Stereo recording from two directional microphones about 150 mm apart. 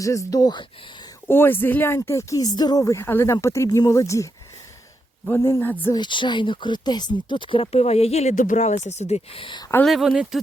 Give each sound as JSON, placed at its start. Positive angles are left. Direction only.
{"t": 0.0, "sound": "speech", "side_deg": 20}
{"t": 1.3, "sound": "speech", "side_deg": 15}
{"t": 5.9, "sound": "speech", "side_deg": 30}
{"t": 9.8, "sound": "speech", "side_deg": 0}